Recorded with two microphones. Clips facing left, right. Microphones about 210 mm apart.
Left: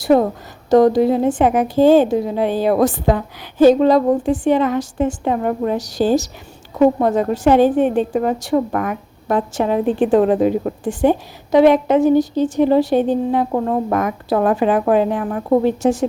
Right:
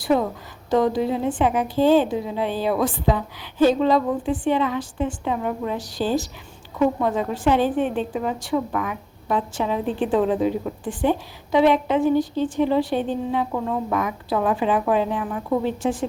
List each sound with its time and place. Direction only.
0.0 s a woman's voice: 45° left (ahead or behind)